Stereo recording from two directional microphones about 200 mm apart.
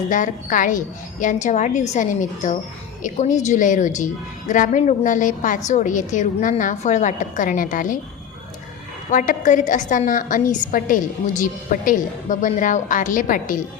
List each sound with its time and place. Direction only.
0.1 s a woman's voice: 40° left (ahead or behind)
9.0 s a woman's voice: 40° left (ahead or behind)